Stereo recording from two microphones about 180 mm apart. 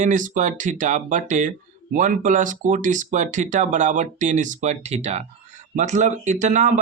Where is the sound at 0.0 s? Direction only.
45° right (ahead or behind).